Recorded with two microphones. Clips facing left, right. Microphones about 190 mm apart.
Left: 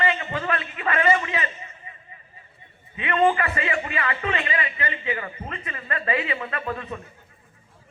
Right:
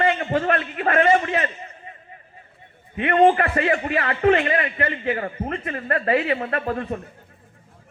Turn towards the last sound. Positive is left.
turn(degrees=-50)  # may be behind; listen again after turning